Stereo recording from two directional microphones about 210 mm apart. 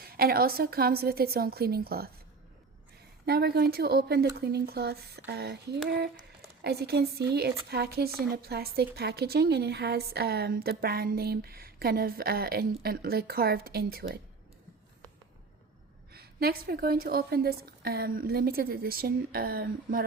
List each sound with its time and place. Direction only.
0.0 s speech: 45° right (ahead or behind)
3.2 s speech: 50° right (ahead or behind)
16.1 s speech: 50° right (ahead or behind)